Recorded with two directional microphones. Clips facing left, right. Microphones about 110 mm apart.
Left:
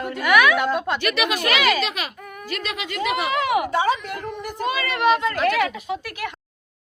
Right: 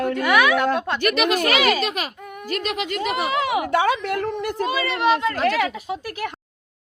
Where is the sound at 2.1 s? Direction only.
20° right (ahead or behind).